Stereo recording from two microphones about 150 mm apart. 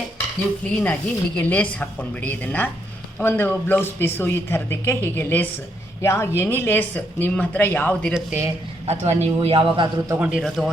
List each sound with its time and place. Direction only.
0.7 s speech: 10° left (ahead or behind)
8.1 s speech: 10° right (ahead or behind)
8.9 s a man's voice: 45° right (ahead or behind)
10.2 s a man's voice: 5° right (ahead or behind)